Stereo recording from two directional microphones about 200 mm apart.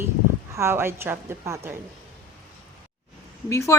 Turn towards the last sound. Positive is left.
turn(degrees=15)  # may be behind; listen again after turning